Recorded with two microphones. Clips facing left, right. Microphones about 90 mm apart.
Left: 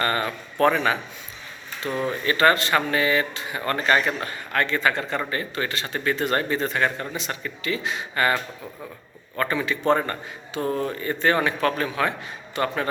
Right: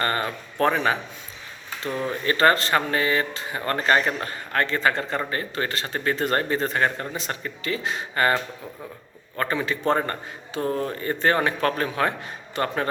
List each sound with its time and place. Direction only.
0.0 s speech: 30° right (ahead or behind)
1.9 s speech: 20° left (ahead or behind)
2.2 s a man's voice: 35° right (ahead or behind)
9.4 s a man's voice: 35° right (ahead or behind)
10.6 s speech: 25° left (ahead or behind)
10.8 s a man's voice: 35° right (ahead or behind)